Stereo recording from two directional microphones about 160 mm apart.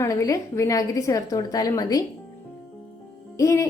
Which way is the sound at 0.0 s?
20° left (ahead or behind).